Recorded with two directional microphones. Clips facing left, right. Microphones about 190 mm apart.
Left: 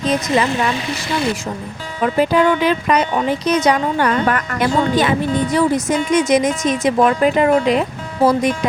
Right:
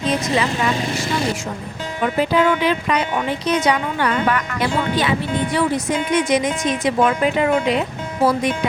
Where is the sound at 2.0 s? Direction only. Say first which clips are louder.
Left 3 dB; 45° left (ahead or behind).